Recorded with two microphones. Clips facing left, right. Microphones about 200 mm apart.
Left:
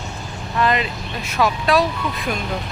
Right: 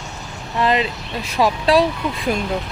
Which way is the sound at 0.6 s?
30° right (ahead or behind).